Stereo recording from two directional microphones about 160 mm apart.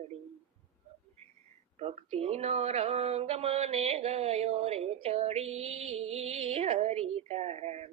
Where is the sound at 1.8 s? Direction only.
40° right (ahead or behind).